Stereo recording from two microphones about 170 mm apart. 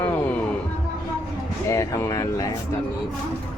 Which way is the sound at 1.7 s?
15° left (ahead or behind).